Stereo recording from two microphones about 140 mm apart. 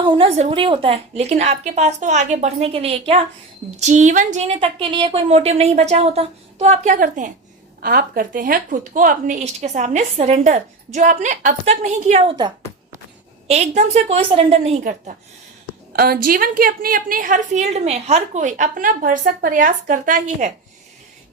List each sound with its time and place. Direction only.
0.0 s a woman's voice: 35° right (ahead or behind)
3.8 s a woman's voice: 55° right (ahead or behind)
4.6 s a woman's voice: 35° right (ahead or behind); by 7.3 s 65° right (ahead or behind)
7.8 s a woman's voice: 90° right; by 10.4 s 50° right (ahead or behind)
10.4 s a woman's voice: 65° right (ahead or behind)
12.2 s speech: 35° right (ahead or behind)
13.5 s a woman's voice: 50° right (ahead or behind)
15.9 s a woman's voice: 90° right; by 20.5 s 70° right (ahead or behind)